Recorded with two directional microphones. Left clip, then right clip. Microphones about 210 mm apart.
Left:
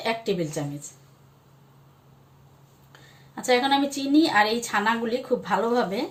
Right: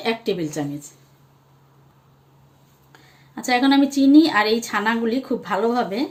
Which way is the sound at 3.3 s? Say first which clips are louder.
Right 3 dB; 30° right (ahead or behind).